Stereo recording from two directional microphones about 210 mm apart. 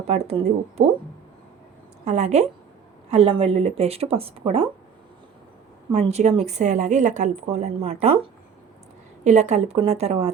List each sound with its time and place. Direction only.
0.1 s a woman's voice: 30° right (ahead or behind)
2.0 s a woman's voice: 35° right (ahead or behind)
5.9 s a woman's voice: 30° right (ahead or behind)